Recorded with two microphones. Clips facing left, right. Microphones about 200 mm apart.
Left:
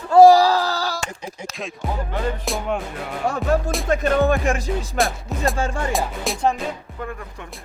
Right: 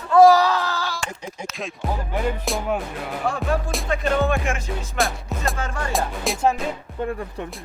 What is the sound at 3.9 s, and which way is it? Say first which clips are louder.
Music: left 3 dB; 40° left (ahead or behind).